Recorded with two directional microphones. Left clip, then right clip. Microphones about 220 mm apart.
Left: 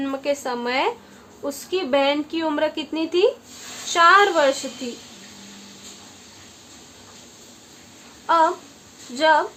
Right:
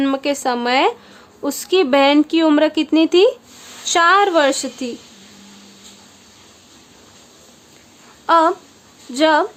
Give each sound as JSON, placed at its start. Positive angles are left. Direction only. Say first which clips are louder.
{"t": 0.0, "sound": "a woman's voice", "louder": "right 6 dB", "side_deg": -45}
{"t": 8.3, "sound": "a woman's voice", "louder": "right 4 dB", "side_deg": -45}